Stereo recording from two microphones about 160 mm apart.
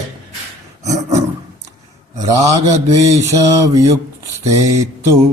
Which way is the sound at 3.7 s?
20° right (ahead or behind).